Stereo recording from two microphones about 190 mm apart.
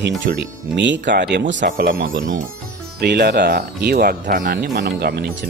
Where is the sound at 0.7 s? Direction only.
70° right (ahead or behind).